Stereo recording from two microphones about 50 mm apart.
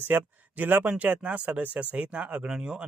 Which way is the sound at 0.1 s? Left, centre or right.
Right.